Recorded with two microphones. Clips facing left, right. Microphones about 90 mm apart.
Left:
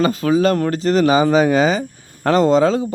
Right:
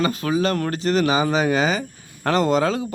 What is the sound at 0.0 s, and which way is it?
Speech, 40° left (ahead or behind).